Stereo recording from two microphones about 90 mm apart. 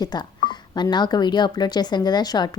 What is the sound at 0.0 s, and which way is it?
A woman's voice, 50° left (ahead or behind).